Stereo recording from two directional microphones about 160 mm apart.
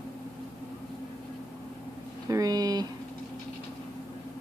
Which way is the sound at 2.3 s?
25° right (ahead or behind).